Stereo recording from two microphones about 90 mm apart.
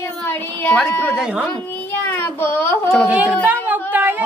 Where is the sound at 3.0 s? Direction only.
15° right (ahead or behind).